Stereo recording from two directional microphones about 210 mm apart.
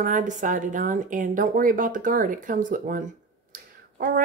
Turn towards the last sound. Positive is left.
turn(degrees=-40)  # may be behind; listen again after turning